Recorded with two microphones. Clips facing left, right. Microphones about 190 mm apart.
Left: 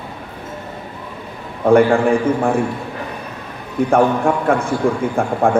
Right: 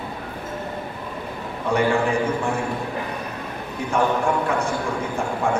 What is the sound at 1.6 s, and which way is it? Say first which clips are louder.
Speech: left 9 dB; 55° left (ahead or behind).